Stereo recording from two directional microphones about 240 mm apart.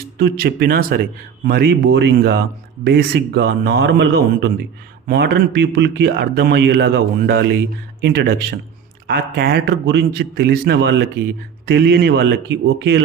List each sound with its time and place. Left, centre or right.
0.2 s a man's voice: right